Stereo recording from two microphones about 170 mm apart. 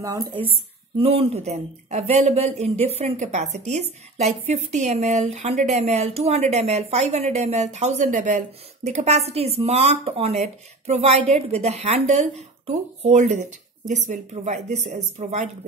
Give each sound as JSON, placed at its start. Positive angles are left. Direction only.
{"t": 0.0, "sound": "a woman's voice", "side_deg": -20}